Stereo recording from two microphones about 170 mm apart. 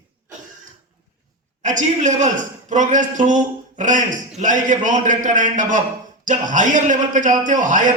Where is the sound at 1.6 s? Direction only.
45° right (ahead or behind).